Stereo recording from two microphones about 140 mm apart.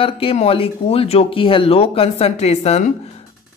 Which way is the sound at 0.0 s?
40° left (ahead or behind).